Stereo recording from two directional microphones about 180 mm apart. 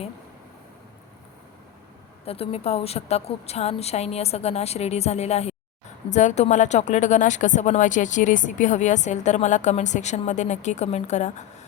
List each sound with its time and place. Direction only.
2.2 s speech: 35° left (ahead or behind)